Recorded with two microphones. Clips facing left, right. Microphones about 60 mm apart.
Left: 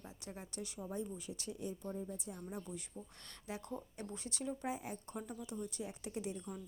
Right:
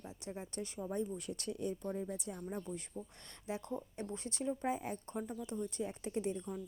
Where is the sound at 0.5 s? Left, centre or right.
Right.